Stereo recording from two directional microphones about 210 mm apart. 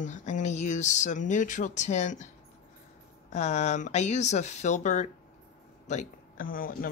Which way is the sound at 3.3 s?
35° left (ahead or behind).